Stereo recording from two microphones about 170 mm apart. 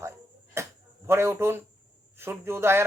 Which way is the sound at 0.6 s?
15° right (ahead or behind).